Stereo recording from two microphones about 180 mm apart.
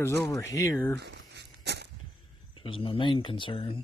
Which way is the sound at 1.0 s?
70° right (ahead or behind).